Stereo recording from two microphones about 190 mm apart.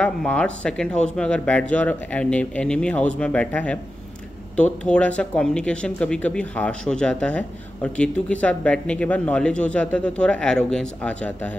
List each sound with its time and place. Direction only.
0.0 s speech: 5° left (ahead or behind)